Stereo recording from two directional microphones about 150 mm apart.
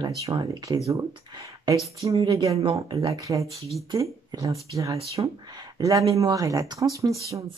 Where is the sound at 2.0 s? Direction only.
40° right (ahead or behind).